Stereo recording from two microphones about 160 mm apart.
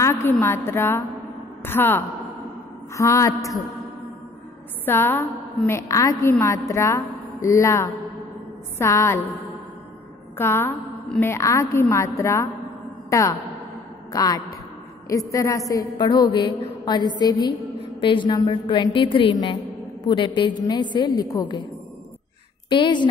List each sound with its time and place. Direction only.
0.0 s a woman's voice: 15° left (ahead or behind)
4.8 s a woman's voice: 15° left (ahead or behind)
10.3 s a woman's voice: 15° left (ahead or behind)
22.7 s a woman's voice: 30° left (ahead or behind)